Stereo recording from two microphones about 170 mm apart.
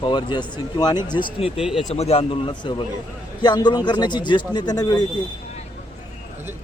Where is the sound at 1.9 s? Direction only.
35° left (ahead or behind).